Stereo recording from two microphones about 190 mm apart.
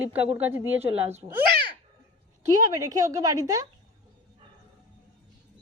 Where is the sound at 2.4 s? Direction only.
20° right (ahead or behind).